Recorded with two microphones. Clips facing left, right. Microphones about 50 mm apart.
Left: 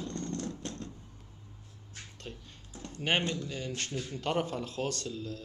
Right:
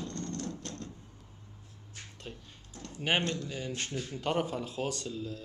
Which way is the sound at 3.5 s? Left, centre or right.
Centre.